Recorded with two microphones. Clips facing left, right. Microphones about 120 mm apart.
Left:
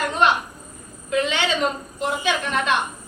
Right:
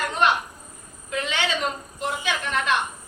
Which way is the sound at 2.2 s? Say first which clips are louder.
Left 2 dB; 20° left (ahead or behind).